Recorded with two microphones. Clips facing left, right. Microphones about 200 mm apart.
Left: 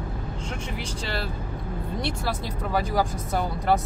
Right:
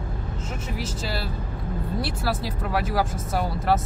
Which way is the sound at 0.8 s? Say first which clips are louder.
Right 2 dB; 5° right (ahead or behind).